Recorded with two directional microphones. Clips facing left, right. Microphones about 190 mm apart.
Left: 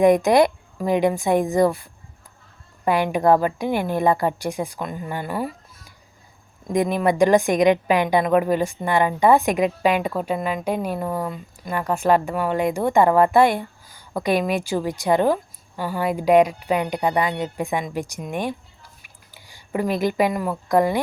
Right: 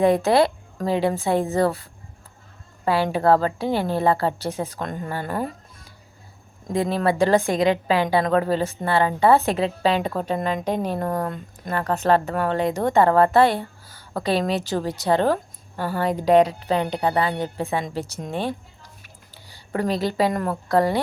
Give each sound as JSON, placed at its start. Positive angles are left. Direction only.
{"t": 0.0, "sound": "speech", "side_deg": 15}
{"t": 6.7, "sound": "speech", "side_deg": 15}